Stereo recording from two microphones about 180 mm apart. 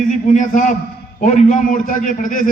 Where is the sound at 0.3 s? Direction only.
45° left (ahead or behind).